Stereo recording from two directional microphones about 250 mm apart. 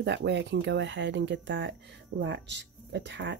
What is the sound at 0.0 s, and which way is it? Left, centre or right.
Speech, right.